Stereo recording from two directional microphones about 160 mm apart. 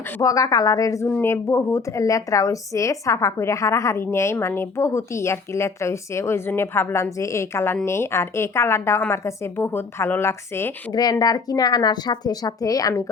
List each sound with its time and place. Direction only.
0.2 s a woman's voice: 20° left (ahead or behind)